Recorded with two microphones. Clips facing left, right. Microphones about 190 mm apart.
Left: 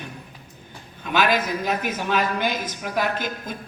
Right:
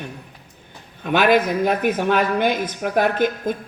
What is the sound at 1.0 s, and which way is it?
A woman's voice, 55° right (ahead or behind).